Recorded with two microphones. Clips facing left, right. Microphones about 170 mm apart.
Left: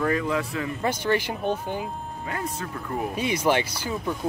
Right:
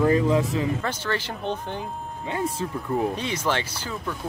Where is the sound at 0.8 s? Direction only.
15° left (ahead or behind).